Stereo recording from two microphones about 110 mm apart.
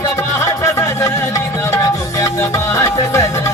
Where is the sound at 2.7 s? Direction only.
25° left (ahead or behind).